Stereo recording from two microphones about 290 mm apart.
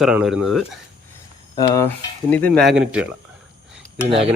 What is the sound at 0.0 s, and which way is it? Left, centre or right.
Speech, centre.